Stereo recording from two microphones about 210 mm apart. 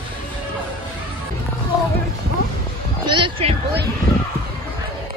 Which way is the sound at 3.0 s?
25° right (ahead or behind).